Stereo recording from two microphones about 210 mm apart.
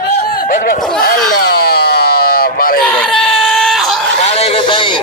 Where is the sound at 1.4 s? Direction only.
50° left (ahead or behind).